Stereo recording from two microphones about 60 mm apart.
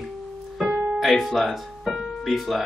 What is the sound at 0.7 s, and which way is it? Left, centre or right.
Piano, right.